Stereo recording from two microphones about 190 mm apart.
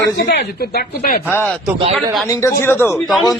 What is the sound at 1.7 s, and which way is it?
Speech, 25° right (ahead or behind).